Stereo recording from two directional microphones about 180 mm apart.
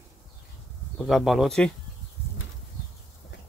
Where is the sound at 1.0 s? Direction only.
Centre (ahead or behind).